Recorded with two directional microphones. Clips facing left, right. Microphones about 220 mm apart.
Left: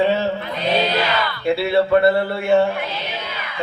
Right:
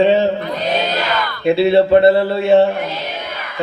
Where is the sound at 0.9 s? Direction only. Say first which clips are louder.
Right 1 dB; 45° right (ahead or behind).